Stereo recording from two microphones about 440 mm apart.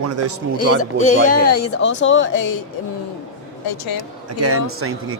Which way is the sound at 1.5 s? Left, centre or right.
Left.